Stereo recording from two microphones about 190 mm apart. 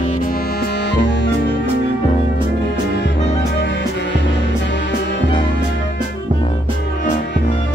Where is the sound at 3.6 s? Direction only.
65° left (ahead or behind).